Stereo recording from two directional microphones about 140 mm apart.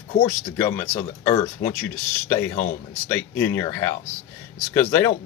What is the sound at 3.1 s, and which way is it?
Speech, 15° left (ahead or behind).